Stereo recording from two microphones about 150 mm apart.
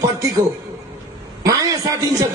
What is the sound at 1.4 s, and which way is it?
Speech, 25° right (ahead or behind).